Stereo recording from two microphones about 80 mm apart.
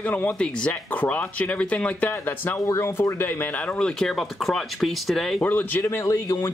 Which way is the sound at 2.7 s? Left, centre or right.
Left.